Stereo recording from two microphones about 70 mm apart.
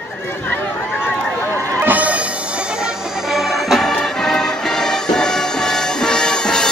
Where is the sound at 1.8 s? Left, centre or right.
Right.